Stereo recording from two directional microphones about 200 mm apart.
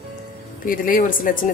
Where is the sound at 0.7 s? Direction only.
45° left (ahead or behind).